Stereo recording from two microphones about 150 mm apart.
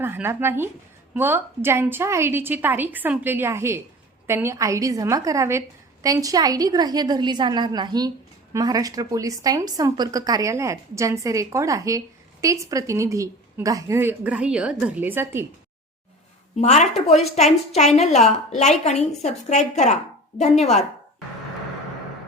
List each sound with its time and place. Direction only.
0.0 s a woman's voice: 15° right (ahead or behind)
16.6 s a woman's voice: 50° left (ahead or behind)